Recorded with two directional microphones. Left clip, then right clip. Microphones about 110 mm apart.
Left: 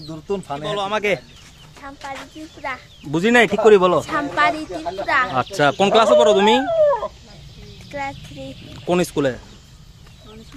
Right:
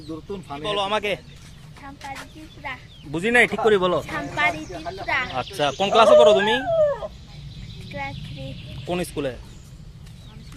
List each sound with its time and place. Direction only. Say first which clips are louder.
0.3 s speech: left 5 dB; 40° left (ahead or behind)
3.1 s speech: left 3 dB; 40° left (ahead or behind); by 4.0 s 25° left (ahead or behind)
4.0 s a woman's voice: left 5 dB; centre (ahead or behind)
5.3 s speech: left 6 dB; 50° left (ahead or behind)
6.8 s chicken: left 5 dB; 70° right (ahead or behind)
7.9 s speech: left 5 dB; centre (ahead or behind)
8.9 s speech: left 8 dB; 55° left (ahead or behind)